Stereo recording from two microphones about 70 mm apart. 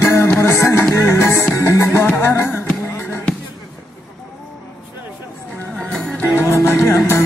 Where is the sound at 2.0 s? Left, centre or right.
Left.